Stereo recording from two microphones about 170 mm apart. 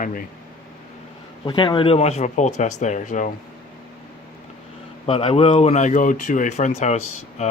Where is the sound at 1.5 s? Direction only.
30° left (ahead or behind); by 3.3 s 45° left (ahead or behind).